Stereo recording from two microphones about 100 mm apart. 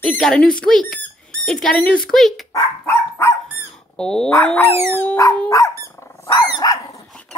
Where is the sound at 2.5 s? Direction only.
30° left (ahead or behind).